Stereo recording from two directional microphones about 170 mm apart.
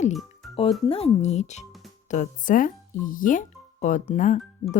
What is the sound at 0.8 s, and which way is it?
Speech, 35° left (ahead or behind).